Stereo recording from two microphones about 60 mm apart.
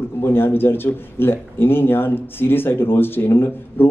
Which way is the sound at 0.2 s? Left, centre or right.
Left.